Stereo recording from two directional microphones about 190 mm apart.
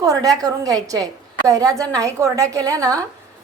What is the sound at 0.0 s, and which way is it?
A woman's voice, 20° right (ahead or behind).